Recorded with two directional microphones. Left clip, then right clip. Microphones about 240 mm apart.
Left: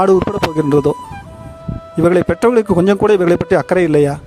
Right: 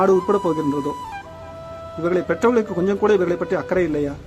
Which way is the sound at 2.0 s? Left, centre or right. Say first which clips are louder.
Left 7 dB; left.